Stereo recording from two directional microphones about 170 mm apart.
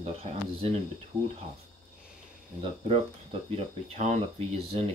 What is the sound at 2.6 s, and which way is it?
Speech, 35° right (ahead or behind).